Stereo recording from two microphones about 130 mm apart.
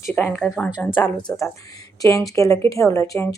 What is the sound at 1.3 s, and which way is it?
Speech, 20° left (ahead or behind).